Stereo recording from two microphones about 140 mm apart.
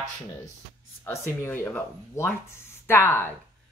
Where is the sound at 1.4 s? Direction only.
15° left (ahead or behind).